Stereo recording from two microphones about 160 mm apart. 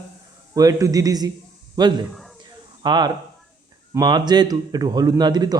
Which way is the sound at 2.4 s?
25° right (ahead or behind).